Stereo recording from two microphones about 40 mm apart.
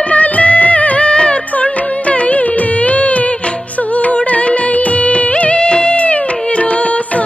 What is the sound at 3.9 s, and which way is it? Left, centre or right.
Music of bollywood, left.